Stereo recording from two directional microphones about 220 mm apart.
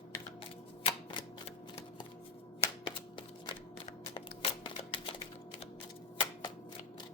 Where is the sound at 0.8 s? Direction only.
25° left (ahead or behind).